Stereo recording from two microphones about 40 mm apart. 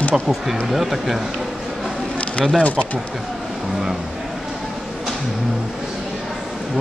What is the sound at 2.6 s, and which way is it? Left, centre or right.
Speech, left.